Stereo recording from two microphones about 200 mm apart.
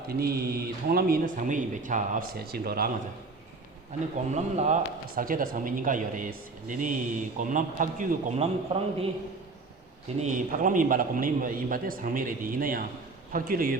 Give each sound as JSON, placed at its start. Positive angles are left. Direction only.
{"t": 0.1, "sound": "speech", "side_deg": -50}
{"t": 4.3, "sound": "speech", "side_deg": -35}
{"t": 8.7, "sound": "a man's voice", "side_deg": -25}
{"t": 10.2, "sound": "speech", "side_deg": -40}